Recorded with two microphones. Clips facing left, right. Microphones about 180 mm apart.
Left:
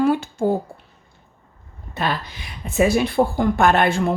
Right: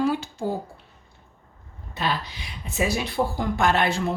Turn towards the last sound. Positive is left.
turn(degrees=55)  # may be behind; listen again after turning